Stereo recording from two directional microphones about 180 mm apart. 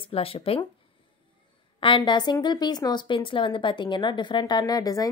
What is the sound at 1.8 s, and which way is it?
Speech, 25° left (ahead or behind).